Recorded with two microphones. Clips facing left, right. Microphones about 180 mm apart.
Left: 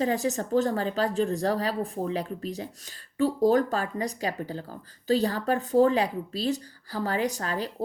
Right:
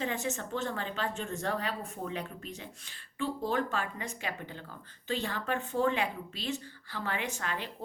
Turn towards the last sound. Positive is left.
turn(degrees=35)  # may be behind; listen again after turning